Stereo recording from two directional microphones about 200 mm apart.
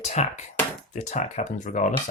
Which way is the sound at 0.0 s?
35° left (ahead or behind).